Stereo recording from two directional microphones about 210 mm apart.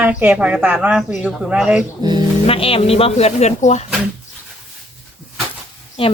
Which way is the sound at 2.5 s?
25° left (ahead or behind).